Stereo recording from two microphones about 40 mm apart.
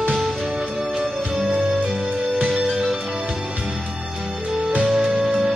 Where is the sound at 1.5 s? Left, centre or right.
Right.